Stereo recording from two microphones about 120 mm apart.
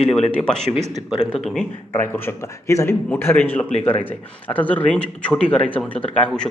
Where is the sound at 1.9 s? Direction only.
20° left (ahead or behind).